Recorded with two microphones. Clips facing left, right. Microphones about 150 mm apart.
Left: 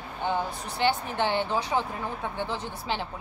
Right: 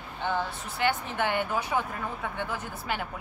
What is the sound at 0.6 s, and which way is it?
Speech, 35° left (ahead or behind).